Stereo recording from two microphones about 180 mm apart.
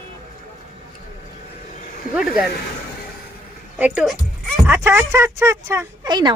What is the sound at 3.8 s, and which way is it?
Speech, 5° right (ahead or behind).